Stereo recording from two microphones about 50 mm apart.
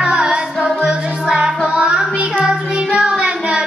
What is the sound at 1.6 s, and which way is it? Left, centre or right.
Child singing, centre.